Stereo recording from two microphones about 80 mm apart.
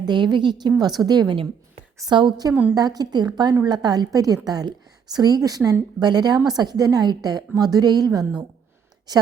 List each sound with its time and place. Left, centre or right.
0.0 s a woman's voice: right
0.8 s a woman's voice: right
2.0 s a woman's voice: right
2.7 s a woman's voice: right
6.0 s a woman's voice: right